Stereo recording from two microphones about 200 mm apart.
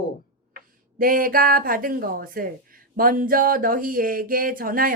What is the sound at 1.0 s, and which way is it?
Speech, 45° right (ahead or behind).